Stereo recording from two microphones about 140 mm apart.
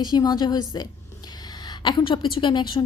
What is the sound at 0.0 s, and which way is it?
A woman's voice, 30° left (ahead or behind).